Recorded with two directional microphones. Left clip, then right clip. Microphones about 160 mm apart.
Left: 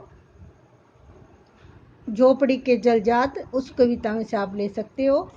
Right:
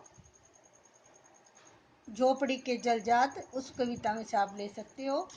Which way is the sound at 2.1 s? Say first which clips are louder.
Left 11 dB; 35° left (ahead or behind).